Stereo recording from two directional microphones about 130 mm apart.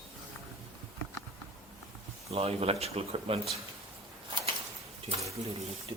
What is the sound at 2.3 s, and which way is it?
Speech, 50° right (ahead or behind).